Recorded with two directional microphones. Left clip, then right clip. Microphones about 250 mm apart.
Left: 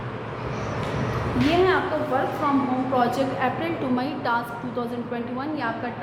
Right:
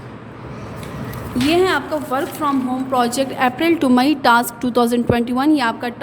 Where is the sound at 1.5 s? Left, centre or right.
Right.